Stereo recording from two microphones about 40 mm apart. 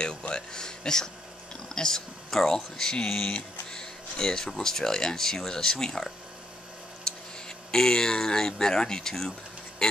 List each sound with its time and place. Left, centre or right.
0.3 s speech: centre